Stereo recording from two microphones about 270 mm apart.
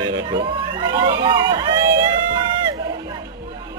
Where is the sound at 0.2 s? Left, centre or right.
Centre.